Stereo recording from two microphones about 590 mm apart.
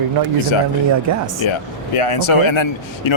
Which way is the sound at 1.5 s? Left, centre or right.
Left.